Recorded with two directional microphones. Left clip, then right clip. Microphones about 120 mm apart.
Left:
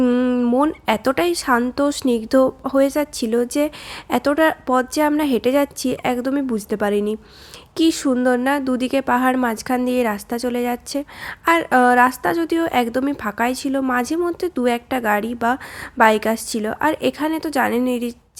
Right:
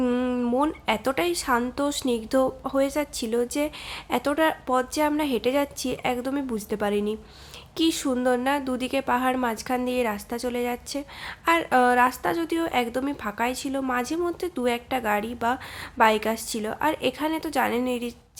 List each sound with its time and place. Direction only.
0.0 s a woman's voice: 25° left (ahead or behind)